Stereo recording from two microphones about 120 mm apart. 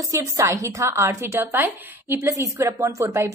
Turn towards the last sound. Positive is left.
turn(degrees=-25)  # may be behind; listen again after turning